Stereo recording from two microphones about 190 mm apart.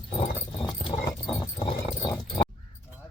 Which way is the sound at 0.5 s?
25° left (ahead or behind).